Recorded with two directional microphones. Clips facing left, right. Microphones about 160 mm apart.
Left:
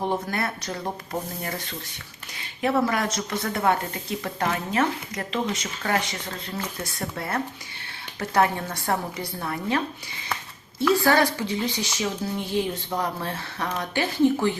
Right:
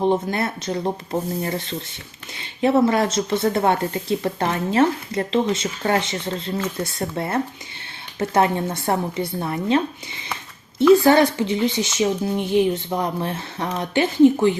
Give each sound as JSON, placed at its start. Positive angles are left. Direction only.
{"t": 0.0, "sound": "a woman's voice", "side_deg": -20}